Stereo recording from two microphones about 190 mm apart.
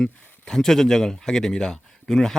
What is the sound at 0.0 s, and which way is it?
Speech, 5° left (ahead or behind).